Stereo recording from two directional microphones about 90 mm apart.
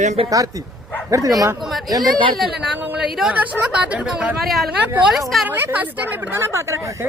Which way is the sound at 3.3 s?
15° right (ahead or behind).